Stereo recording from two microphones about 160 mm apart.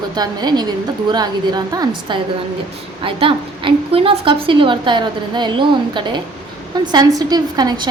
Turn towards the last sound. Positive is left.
turn(degrees=-25)  # may be behind; listen again after turning